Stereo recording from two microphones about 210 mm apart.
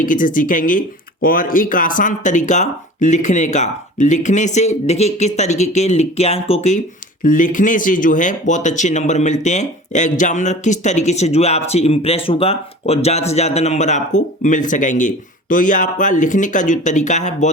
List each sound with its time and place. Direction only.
0.0 s speech: 40° left (ahead or behind)